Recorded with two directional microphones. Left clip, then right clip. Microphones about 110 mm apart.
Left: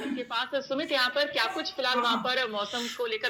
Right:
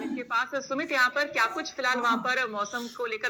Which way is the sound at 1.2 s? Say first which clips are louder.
Right 1 dB; 30° right (ahead or behind).